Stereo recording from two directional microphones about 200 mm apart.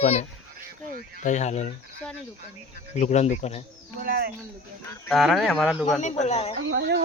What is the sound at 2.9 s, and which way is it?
Speech, 35° left (ahead or behind).